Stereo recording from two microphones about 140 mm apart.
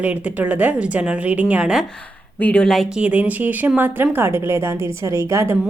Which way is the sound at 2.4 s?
5° left (ahead or behind).